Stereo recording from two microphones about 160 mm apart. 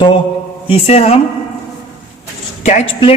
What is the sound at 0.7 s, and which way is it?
Speech, 40° left (ahead or behind).